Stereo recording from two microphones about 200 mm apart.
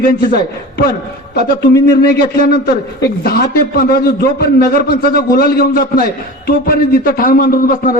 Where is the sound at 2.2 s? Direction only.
45° left (ahead or behind).